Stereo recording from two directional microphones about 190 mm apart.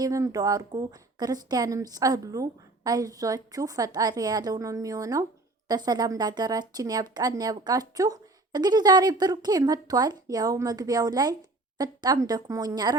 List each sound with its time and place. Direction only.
0.0 s speech: 15° right (ahead or behind)